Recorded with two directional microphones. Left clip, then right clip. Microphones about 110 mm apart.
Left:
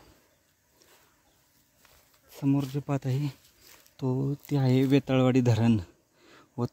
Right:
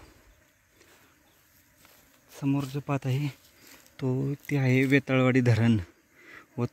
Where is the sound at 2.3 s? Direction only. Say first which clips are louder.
Left 2 dB; 30° left (ahead or behind).